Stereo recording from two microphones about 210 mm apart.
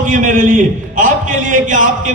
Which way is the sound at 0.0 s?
40° right (ahead or behind).